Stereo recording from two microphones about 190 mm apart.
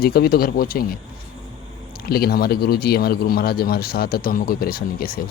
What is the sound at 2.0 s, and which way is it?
Speech, 55° left (ahead or behind).